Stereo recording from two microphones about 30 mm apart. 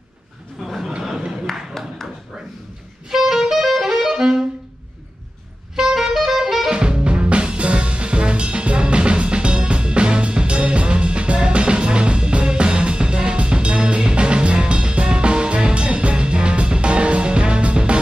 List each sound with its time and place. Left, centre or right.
0.7 s a sound: centre
1.5 s a sound: centre
3.1 s saxophone: centre
3.6 s music: centre
5.9 s saxophone: centre
6.7 s music: right